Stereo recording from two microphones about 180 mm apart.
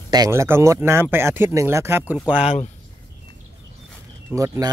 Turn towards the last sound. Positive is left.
turn(degrees=-15)  # may be behind; listen again after turning